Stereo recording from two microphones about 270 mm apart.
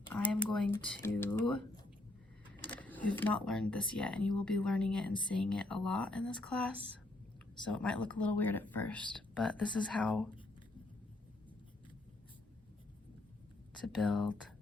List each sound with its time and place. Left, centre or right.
0.1 s a sound: centre
1.0 s speech: centre
13.7 s speech: centre